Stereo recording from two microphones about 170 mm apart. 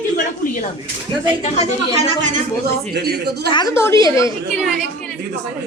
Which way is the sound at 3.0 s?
70° right (ahead or behind).